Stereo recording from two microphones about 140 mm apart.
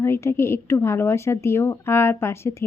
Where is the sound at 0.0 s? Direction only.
20° left (ahead or behind).